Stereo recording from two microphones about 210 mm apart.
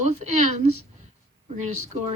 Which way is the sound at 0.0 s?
30° right (ahead or behind).